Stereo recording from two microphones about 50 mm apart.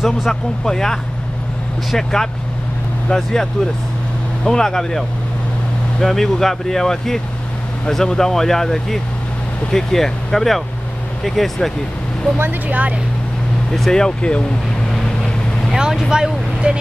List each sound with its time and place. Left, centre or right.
0.0 s speech: centre
0.7 s speech: centre
4.5 s speech: centre
12.4 s speech: right
13.7 s speech: centre
15.7 s speech: centre